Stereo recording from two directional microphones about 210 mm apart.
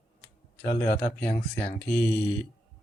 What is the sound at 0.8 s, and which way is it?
Speech, 40° left (ahead or behind).